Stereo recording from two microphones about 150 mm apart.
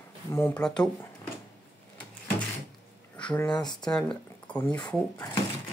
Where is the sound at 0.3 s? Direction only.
20° left (ahead or behind).